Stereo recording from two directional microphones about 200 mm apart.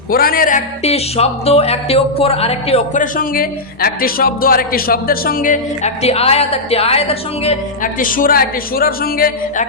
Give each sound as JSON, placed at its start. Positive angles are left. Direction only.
{"t": 0.1, "sound": "speech", "side_deg": 45}